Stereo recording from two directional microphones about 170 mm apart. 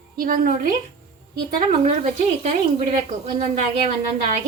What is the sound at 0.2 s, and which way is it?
Speech, 55° right (ahead or behind).